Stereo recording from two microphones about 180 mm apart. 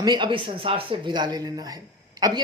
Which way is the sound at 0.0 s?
25° right (ahead or behind).